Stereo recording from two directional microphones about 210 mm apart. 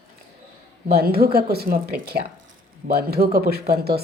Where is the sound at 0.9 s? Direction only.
45° right (ahead or behind).